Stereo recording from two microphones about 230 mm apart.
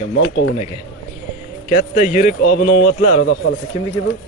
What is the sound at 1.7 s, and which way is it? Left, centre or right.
Speech, left.